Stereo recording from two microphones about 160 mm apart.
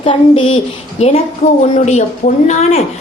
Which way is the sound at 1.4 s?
45° left (ahead or behind).